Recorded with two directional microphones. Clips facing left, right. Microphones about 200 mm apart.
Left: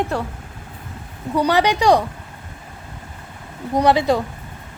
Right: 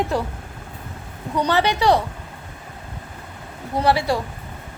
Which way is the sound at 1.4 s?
15° left (ahead or behind).